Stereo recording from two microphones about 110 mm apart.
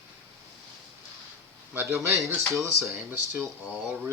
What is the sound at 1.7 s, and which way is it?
Speech, 20° right (ahead or behind).